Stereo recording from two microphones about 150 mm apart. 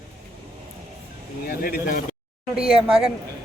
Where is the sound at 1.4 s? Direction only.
85° left.